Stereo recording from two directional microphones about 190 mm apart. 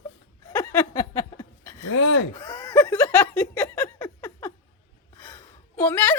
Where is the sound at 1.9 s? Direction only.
90° left.